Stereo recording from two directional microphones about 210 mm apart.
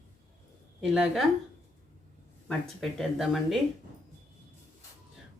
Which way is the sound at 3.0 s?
Centre (ahead or behind).